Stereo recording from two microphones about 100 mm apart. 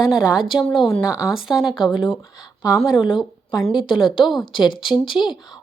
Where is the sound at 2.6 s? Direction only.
35° left (ahead or behind).